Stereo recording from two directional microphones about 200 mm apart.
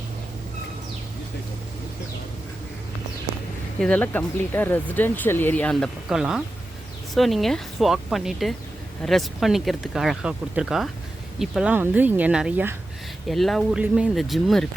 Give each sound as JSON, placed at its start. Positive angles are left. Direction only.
{"t": 3.8, "sound": "speech", "side_deg": 5}